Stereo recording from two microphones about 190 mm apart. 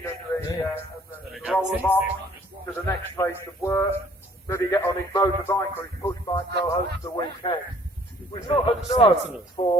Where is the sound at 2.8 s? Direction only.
15° left (ahead or behind).